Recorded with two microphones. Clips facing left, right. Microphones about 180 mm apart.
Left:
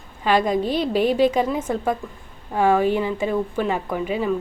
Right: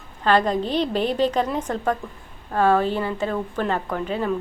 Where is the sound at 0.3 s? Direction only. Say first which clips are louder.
Even; 10° left (ahead or behind).